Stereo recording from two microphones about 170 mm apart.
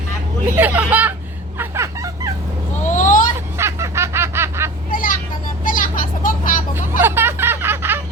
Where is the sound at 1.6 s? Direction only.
15° right (ahead or behind).